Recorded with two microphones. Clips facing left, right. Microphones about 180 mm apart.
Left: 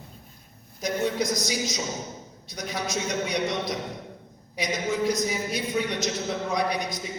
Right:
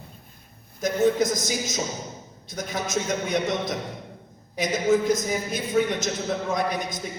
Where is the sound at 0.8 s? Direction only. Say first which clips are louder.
Right 5 dB; 50° right (ahead or behind).